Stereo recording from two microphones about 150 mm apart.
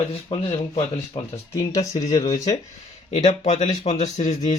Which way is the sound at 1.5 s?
20° left (ahead or behind).